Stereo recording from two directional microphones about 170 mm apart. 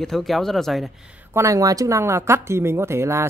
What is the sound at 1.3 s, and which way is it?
Speech, 20° right (ahead or behind).